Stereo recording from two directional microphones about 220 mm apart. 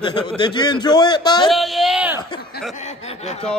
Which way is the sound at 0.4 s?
20° left (ahead or behind).